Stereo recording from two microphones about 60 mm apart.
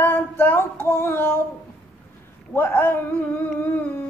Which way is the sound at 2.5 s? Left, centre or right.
Left.